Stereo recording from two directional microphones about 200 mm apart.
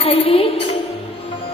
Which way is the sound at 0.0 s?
30° left (ahead or behind).